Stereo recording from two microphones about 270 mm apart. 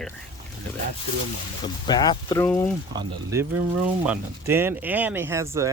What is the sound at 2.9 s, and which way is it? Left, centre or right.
Speech, centre.